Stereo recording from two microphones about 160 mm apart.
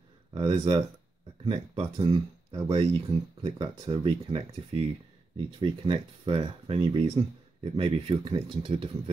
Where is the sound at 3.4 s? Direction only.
30° right (ahead or behind).